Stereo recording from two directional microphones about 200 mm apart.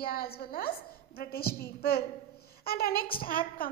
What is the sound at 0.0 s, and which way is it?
A child's voice, 50° left (ahead or behind).